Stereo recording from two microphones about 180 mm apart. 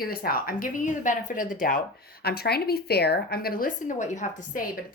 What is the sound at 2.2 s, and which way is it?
A woman's voice, 60° left (ahead or behind).